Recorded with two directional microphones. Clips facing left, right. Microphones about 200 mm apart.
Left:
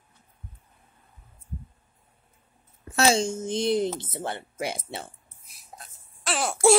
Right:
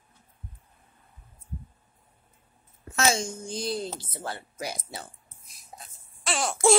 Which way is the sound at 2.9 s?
35° left (ahead or behind).